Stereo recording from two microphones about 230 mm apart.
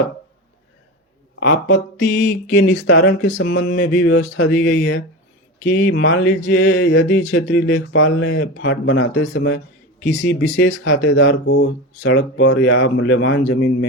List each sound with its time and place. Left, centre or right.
1.4 s speech: left